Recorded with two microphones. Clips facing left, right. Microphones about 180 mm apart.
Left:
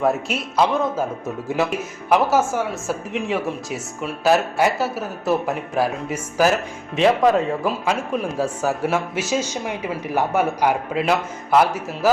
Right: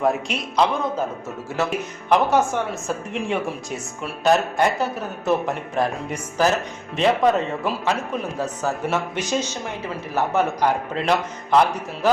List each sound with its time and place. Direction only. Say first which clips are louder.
0.0 s a woman's voice: left 1 dB; 5° left (ahead or behind)
1.5 s a man's voice: left 3 dB; 15° left (ahead or behind)
2.0 s a woman's voice: left 1 dB; 5° left (ahead or behind)